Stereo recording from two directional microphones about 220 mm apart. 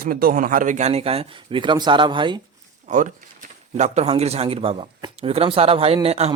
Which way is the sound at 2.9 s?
35° right (ahead or behind).